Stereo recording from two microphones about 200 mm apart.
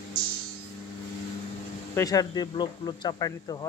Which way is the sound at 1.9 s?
15° left (ahead or behind).